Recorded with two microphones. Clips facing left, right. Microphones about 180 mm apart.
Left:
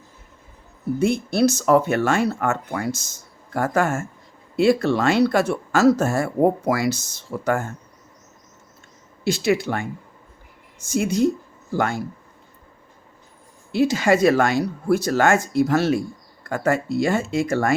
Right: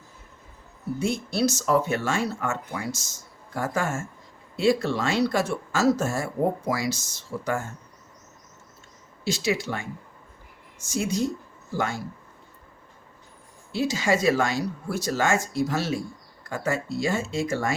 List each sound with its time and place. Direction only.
0.9 s speech: 60° left (ahead or behind)
9.2 s speech: 60° left (ahead or behind)
13.7 s speech: 60° left (ahead or behind)